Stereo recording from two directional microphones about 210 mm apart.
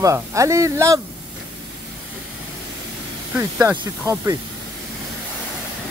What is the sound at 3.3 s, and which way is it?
Speech, 10° right (ahead or behind).